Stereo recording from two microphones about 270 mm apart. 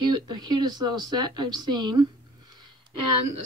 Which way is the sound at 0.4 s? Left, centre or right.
Centre.